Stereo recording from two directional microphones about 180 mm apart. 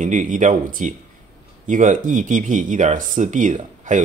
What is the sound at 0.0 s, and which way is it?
Speech, 45° right (ahead or behind).